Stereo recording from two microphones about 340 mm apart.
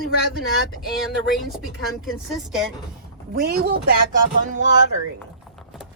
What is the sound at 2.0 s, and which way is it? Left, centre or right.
Speech, centre.